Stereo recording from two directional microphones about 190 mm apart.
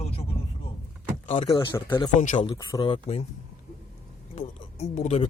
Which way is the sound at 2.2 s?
40° left (ahead or behind).